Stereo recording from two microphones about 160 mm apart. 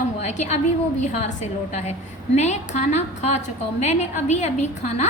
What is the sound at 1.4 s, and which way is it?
A woman's voice, 45° left (ahead or behind).